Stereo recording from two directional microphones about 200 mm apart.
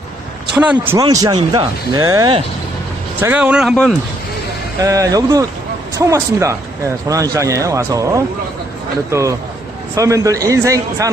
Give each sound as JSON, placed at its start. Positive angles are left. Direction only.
{"t": 0.6, "sound": "a man's voice", "side_deg": -10}
{"t": 1.0, "sound": "speech", "side_deg": -20}
{"t": 4.8, "sound": "a man's voice", "side_deg": -15}